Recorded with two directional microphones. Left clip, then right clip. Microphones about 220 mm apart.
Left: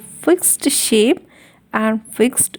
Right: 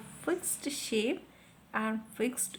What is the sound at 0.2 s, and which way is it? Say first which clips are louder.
A woman's voice: left 19 dB; 40° left (ahead or behind).